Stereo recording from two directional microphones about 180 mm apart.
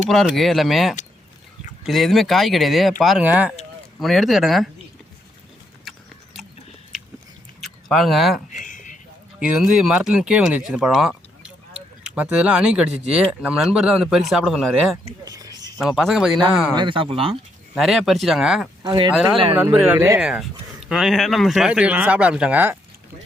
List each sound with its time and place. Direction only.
0.1 s speech: centre (ahead or behind)
7.9 s speech: centre (ahead or behind)
8.5 s a sound: 45° left (ahead or behind)
9.4 s speech: 5° right (ahead or behind)
15.2 s a sound: 20° right (ahead or behind)
15.8 s speech: centre (ahead or behind)
16.7 s speech: 25° right (ahead or behind)
17.7 s speech: centre (ahead or behind)
18.8 s speech: 25° right (ahead or behind)
19.1 s speech: centre (ahead or behind)
19.5 s speech: 15° right (ahead or behind)
20.1 s speech: 5° right (ahead or behind)